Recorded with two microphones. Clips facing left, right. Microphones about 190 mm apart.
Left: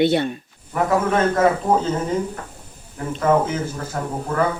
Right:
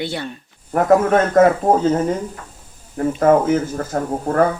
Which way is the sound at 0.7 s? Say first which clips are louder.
Right 5 dB; 45° right (ahead or behind).